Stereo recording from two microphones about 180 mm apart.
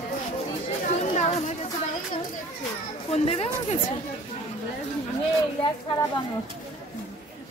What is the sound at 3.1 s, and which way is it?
Speech, 35° left (ahead or behind).